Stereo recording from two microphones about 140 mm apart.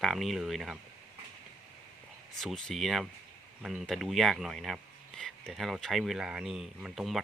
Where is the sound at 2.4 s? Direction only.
Centre (ahead or behind).